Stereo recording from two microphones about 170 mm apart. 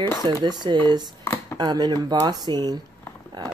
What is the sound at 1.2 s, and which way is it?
Chopping, 15° left (ahead or behind).